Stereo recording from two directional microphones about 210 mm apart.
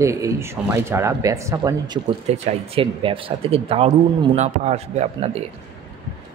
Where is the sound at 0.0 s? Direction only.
15° right (ahead or behind); by 5.4 s 30° right (ahead or behind).